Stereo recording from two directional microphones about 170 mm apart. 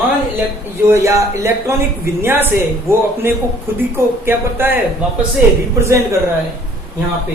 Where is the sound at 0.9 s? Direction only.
15° right (ahead or behind).